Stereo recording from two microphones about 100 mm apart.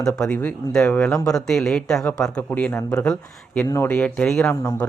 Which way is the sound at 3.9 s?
10° left (ahead or behind).